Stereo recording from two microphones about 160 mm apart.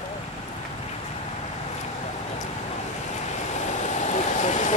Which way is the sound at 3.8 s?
50° left (ahead or behind).